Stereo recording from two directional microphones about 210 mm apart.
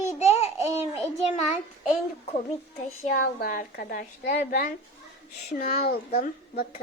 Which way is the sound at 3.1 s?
45° left (ahead or behind).